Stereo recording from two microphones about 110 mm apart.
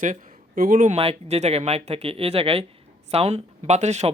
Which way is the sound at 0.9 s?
65° right (ahead or behind).